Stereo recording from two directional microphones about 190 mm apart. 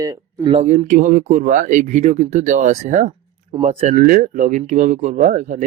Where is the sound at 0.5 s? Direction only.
35° right (ahead or behind).